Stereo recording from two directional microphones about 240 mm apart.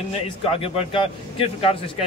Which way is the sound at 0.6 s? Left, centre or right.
Left.